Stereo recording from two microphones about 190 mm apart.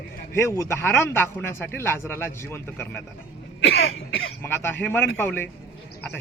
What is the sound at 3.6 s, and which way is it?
Cough, 65° left (ahead or behind).